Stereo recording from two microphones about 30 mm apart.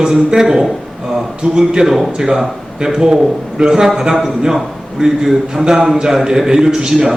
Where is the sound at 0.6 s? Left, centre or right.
Centre.